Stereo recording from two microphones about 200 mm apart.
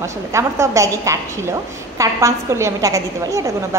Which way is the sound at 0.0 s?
15° right (ahead or behind).